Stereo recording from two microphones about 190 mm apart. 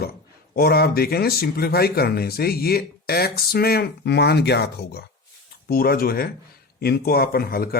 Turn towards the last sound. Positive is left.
turn(degrees=55)  # may be behind; listen again after turning